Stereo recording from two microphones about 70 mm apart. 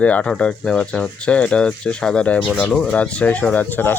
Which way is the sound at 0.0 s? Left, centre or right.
Centre.